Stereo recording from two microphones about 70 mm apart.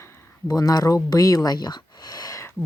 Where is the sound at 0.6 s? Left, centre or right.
Left.